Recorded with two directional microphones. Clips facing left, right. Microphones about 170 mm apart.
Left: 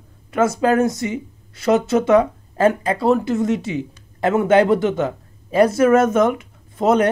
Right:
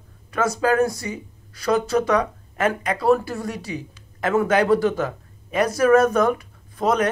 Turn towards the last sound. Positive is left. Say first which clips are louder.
# left 4 dB
turn(degrees=25)  # may be behind; listen again after turning